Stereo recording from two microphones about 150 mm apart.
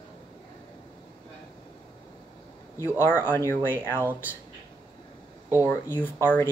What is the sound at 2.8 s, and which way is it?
Speech, 15° left (ahead or behind).